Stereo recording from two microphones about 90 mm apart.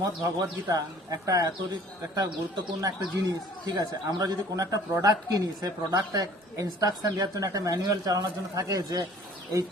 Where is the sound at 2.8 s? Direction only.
40° right (ahead or behind).